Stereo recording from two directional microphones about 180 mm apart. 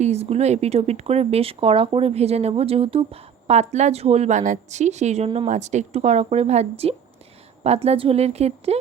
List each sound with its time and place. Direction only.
0.0 s speech: 35° right (ahead or behind)